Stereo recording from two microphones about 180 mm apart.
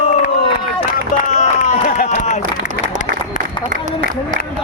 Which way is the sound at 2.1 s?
40° left (ahead or behind).